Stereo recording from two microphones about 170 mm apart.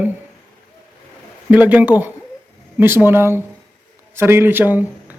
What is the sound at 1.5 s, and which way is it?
Speech, 10° right (ahead or behind).